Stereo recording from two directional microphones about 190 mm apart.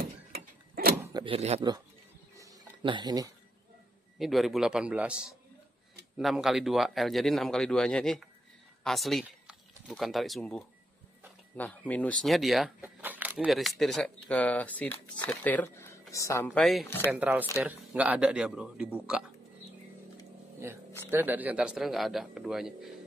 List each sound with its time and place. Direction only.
0.3 s mechanisms: 55° right (ahead or behind)
0.9 s zipper: 15° right (ahead or behind)
1.2 s speech: 30° right (ahead or behind)
2.3 s music: 20° right (ahead or behind)
4.2 s speech: centre (ahead or behind); by 16.4 s 15° left (ahead or behind)
16.4 s speech: centre (ahead or behind)
16.8 s speech: 10° left (ahead or behind)
17.1 s speech: 10° right (ahead or behind)
21.1 s speech: 10° right (ahead or behind)